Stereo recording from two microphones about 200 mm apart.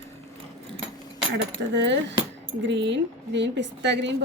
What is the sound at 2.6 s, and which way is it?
A woman's voice, 60° right (ahead or behind).